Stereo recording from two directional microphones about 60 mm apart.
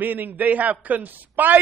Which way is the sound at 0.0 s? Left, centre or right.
Right.